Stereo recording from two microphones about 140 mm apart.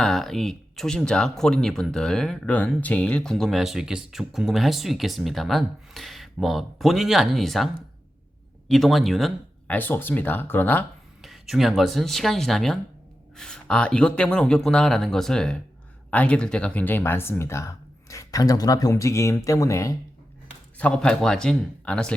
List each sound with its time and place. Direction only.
0.0 s speech: centre (ahead or behind)
8.7 s speech: centre (ahead or behind)
9.6 s speech: 10° left (ahead or behind)
11.2 s speech: centre (ahead or behind); by 20.0 s 20° left (ahead or behind)
20.7 s speech: 10° left (ahead or behind)